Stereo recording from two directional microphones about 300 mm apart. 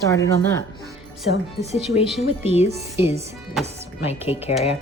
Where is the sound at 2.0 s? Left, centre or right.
Centre.